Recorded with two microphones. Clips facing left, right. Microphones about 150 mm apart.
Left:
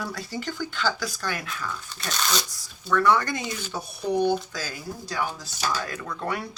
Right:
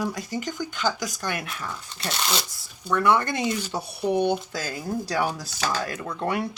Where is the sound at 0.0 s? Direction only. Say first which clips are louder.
Right 3 dB; 15° right (ahead or behind).